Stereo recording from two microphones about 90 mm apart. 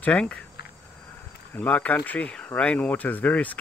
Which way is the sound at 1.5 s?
15° left (ahead or behind).